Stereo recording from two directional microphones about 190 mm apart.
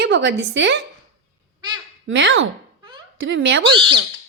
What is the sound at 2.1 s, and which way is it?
Speech, 80° right.